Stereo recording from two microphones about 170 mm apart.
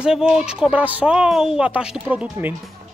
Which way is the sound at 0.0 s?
5° right (ahead or behind).